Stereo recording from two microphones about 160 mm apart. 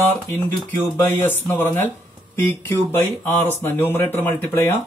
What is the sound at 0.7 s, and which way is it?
Speech, 10° left (ahead or behind).